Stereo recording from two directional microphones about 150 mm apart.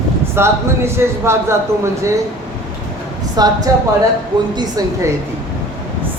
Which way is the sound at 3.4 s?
25° right (ahead or behind).